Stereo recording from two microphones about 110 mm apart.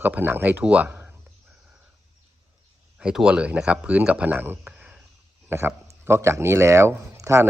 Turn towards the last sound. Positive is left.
turn(degrees=-25)  # may be behind; listen again after turning